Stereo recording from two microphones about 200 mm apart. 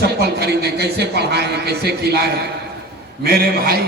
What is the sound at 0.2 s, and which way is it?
A man's voice, 55° right (ahead or behind).